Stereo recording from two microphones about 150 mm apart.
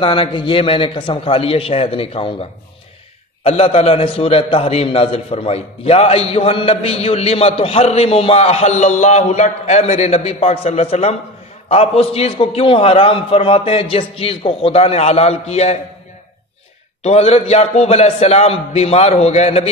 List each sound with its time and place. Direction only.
0.0 s a man's voice: 35° left (ahead or behind)
3.4 s a man's voice: 45° left (ahead or behind)
17.0 s a man's voice: 45° left (ahead or behind)